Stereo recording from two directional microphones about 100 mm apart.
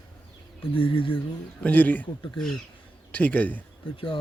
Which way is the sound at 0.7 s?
65° left (ahead or behind).